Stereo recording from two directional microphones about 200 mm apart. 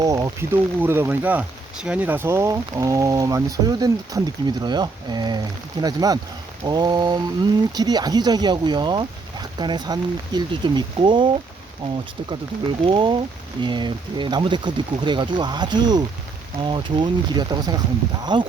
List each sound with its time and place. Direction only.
0.0 s speech: 15° right (ahead or behind)